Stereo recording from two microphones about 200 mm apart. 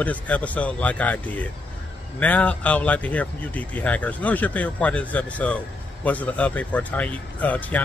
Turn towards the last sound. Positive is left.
turn(degrees=5)  # may be behind; listen again after turning